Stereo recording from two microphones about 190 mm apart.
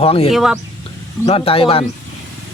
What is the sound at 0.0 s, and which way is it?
Speech, 30° left (ahead or behind).